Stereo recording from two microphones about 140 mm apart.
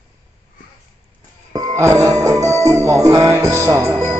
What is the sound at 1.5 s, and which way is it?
Music, 25° right (ahead or behind).